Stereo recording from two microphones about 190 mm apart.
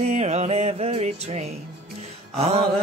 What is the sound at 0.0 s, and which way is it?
Music, 35° right (ahead or behind).